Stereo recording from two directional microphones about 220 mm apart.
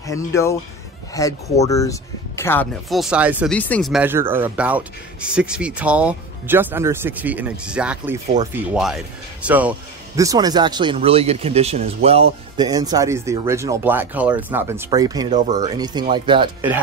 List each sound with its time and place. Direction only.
0.0 s speech: 15° left (ahead or behind); by 3.5 s 5° right (ahead or behind)
3.5 s speech: 5° left (ahead or behind); by 16.4 s 20° right (ahead or behind)